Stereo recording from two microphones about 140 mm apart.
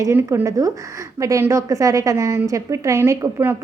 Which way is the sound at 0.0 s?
20° right (ahead or behind).